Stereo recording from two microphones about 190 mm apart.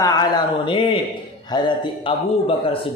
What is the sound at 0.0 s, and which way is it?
Speech, 20° left (ahead or behind).